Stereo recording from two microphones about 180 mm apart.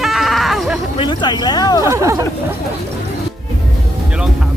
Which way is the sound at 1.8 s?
15° right (ahead or behind).